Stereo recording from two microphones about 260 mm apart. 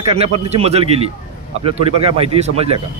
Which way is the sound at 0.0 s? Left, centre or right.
Right.